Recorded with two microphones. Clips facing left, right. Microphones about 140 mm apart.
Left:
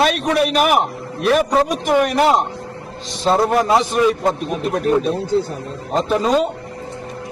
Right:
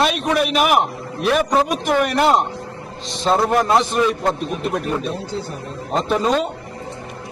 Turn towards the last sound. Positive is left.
turn(degrees=5)  # may be behind; listen again after turning